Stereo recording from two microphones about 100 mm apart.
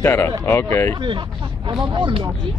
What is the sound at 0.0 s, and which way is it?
Speech, 25° left (ahead or behind).